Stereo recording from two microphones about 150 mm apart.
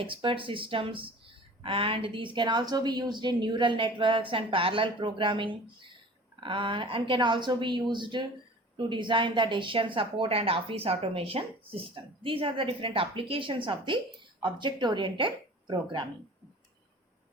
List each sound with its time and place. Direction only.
0.0 s speech: 35° right (ahead or behind)